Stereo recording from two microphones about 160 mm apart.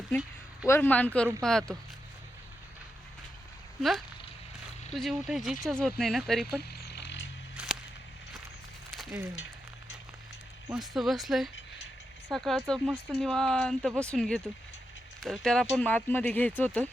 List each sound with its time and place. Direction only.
0.7 s speech: 10° left (ahead or behind)
3.8 s speech: centre (ahead or behind)
6.6 s a sound: 85° left
7.5 s whip: 5° right (ahead or behind)
10.8 s speech: centre (ahead or behind)